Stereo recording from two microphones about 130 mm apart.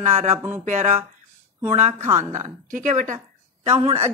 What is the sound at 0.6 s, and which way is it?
A woman's voice, 65° right (ahead or behind).